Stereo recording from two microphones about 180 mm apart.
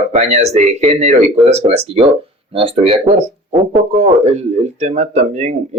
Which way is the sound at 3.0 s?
10° right (ahead or behind).